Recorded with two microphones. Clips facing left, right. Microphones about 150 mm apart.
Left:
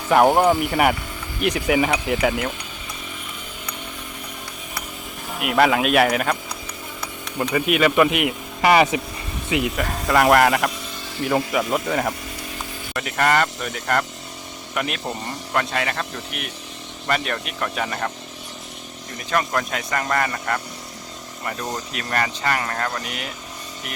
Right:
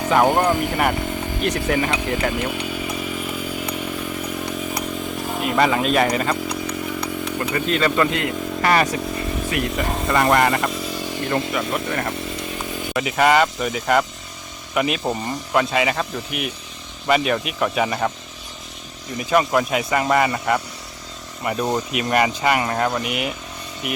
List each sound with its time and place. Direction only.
0.1 s speech: 10° left (ahead or behind)
1.4 s speech: 70° left (ahead or behind)
1.6 s speech: 10° left (ahead or behind)
5.4 s speech: 5° left (ahead or behind)
7.5 s speech: 10° left (ahead or behind)
9.6 s speech: centre (ahead or behind)
11.2 s speech: 10° left (ahead or behind)
12.9 s speech: 5° right (ahead or behind)
19.5 s speech: 10° right (ahead or behind)